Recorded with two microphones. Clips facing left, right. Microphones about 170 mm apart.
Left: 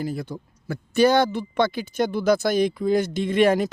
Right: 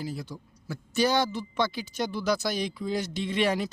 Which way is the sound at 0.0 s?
55° left (ahead or behind).